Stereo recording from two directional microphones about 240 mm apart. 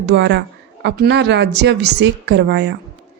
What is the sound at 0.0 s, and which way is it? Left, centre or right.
A woman's voice, right.